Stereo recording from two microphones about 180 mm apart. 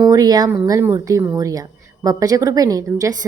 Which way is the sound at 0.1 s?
20° right (ahead or behind).